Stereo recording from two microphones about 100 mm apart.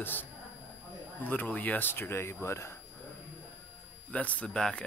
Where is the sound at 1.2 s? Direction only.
15° left (ahead or behind).